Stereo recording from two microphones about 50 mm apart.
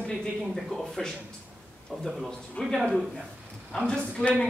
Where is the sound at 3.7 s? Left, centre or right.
Centre.